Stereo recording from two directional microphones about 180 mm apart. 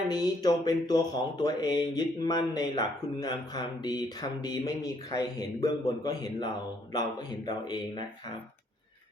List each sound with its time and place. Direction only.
0.1 s speech: 20° left (ahead or behind)